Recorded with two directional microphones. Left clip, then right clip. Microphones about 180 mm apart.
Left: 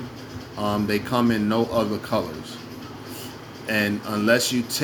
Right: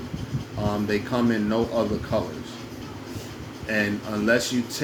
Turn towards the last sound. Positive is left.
turn(degrees=35)  # may be behind; listen again after turning